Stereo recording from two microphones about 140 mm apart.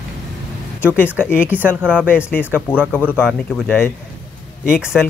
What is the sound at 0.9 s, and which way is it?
Speech, 15° left (ahead or behind).